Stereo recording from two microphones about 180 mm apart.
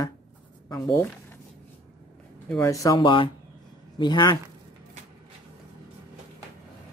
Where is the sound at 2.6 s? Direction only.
20° left (ahead or behind).